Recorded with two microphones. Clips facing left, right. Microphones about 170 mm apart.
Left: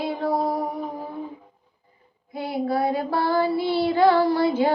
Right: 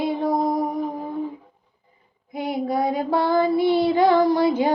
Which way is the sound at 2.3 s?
20° right (ahead or behind).